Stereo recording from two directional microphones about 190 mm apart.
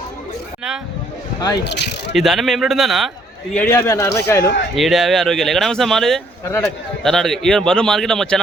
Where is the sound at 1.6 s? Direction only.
65° left (ahead or behind).